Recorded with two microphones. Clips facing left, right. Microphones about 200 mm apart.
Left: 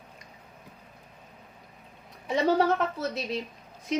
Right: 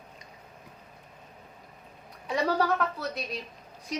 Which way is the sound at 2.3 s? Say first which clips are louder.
Left 3 dB; 25° left (ahead or behind).